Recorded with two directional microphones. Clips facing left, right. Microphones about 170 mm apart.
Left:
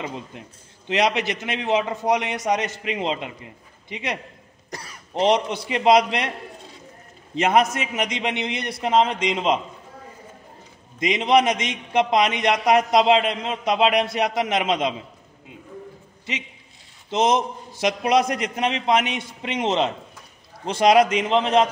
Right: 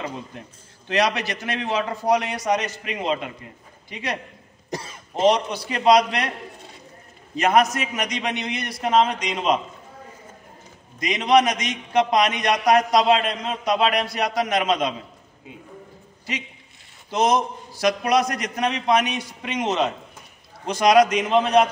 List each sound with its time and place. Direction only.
0.8 s a man's voice: 20° left (ahead or behind)
4.6 s speech: 20° right (ahead or behind)
5.3 s a man's voice: 20° left (ahead or behind)
7.3 s a man's voice: 25° left (ahead or behind)
11.0 s a man's voice: 25° left (ahead or behind)
17.1 s a man's voice: 25° left (ahead or behind)